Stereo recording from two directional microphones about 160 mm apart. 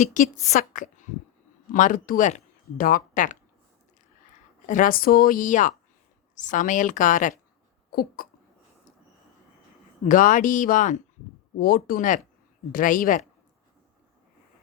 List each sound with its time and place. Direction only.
0.0 s a woman's voice: 55° left (ahead or behind)
4.6 s speech: 55° left (ahead or behind)
7.9 s speech: 65° left (ahead or behind)
10.1 s speech: 55° left (ahead or behind)
11.5 s speech: 65° left (ahead or behind)